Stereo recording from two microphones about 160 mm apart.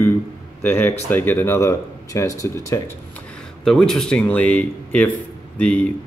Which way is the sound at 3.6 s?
Centre (ahead or behind).